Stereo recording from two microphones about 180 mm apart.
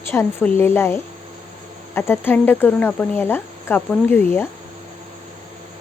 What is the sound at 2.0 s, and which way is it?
Speech, 10° left (ahead or behind).